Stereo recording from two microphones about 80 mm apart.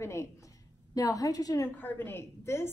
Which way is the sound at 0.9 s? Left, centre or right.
Left.